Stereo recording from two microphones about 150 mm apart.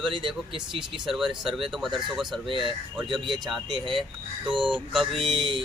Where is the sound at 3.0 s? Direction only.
30° right (ahead or behind).